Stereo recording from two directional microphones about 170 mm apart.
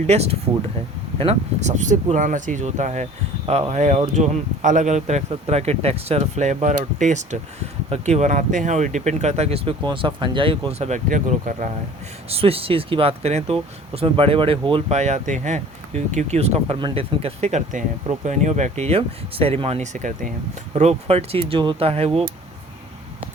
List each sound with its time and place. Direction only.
0.1 s speech: 40° right (ahead or behind)
12.3 s speech: 35° right (ahead or behind)